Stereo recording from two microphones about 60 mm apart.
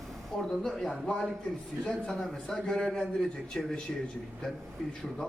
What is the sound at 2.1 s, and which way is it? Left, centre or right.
A man's voice, centre.